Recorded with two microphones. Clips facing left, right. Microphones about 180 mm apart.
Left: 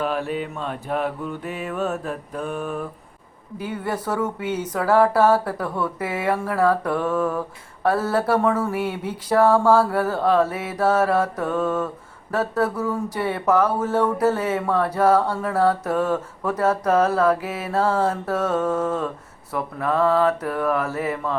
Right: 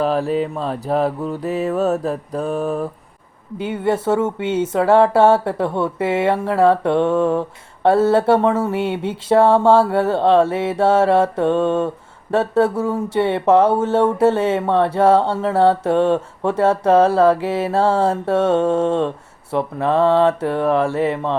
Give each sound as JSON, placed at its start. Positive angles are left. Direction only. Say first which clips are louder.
{"t": 0.0, "sound": "mantra", "louder": "right 6 dB", "side_deg": -35}
{"t": 3.6, "sound": "speech", "louder": "right 7 dB", "side_deg": -25}